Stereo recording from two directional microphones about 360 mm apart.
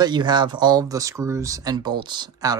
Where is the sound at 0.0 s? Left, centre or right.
Centre.